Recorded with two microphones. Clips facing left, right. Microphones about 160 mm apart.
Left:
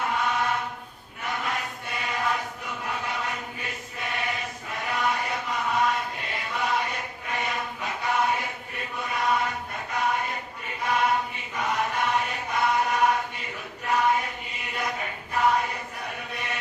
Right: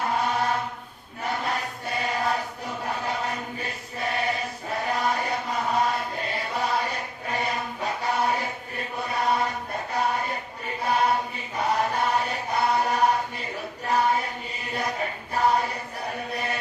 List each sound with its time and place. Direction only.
0.1 s chant: 35° right (ahead or behind)
13.8 s a sound: 35° right (ahead or behind)
16.3 s chant: 35° right (ahead or behind)